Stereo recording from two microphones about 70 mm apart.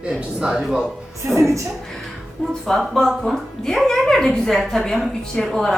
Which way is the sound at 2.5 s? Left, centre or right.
Centre.